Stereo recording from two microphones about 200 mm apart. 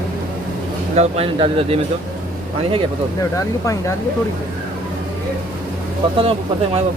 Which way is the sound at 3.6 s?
15° left (ahead or behind).